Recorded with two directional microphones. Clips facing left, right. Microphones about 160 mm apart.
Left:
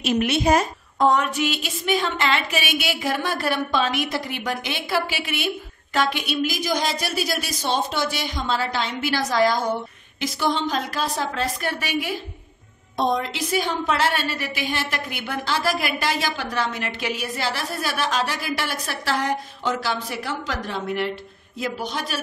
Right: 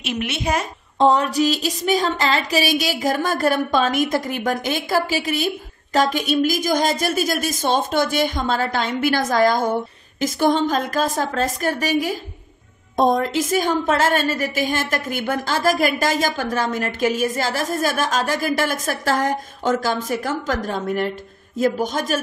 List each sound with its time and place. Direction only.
0.0 s a woman's voice: 40° left (ahead or behind)
0.9 s a woman's voice: 30° right (ahead or behind)